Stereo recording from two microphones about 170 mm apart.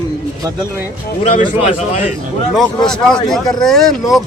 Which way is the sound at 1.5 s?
35° left (ahead or behind).